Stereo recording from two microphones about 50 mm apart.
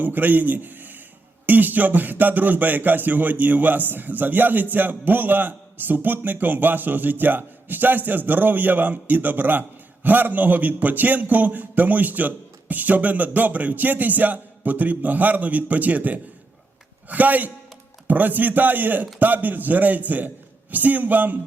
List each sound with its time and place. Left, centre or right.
0.0 s a man's voice: right